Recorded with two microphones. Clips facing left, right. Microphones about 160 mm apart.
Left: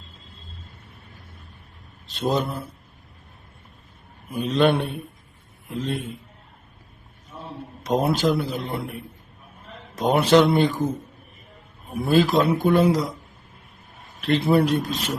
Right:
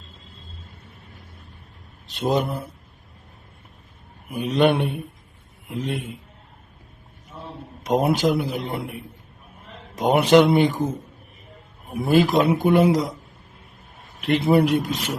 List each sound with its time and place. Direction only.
2.0 s speech: 15° right (ahead or behind)
4.3 s speech: 15° right (ahead or behind)
7.9 s speech: 20° right (ahead or behind)
10.0 s speech: 15° right (ahead or behind)
12.0 s speech: 20° right (ahead or behind)
14.2 s speech: 15° right (ahead or behind)